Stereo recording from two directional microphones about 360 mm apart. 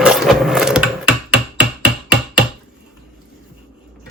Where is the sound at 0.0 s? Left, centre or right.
Centre.